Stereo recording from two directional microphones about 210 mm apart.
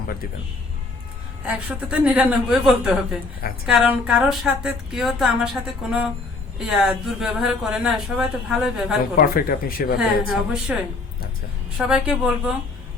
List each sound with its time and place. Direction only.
1.5 s a woman's voice: 5° right (ahead or behind)
9.1 s speech: 45° left (ahead or behind)
10.0 s a woman's voice: centre (ahead or behind)
11.8 s a woman's voice: 5° right (ahead or behind)